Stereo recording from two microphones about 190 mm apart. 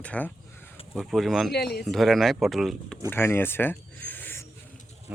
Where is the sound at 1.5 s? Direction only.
55° left (ahead or behind).